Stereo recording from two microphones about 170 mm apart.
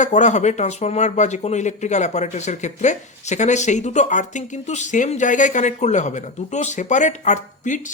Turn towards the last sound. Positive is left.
turn(degrees=50)  # may be behind; listen again after turning